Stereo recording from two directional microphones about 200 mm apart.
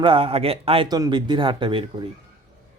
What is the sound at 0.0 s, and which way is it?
Speech, 30° right (ahead or behind).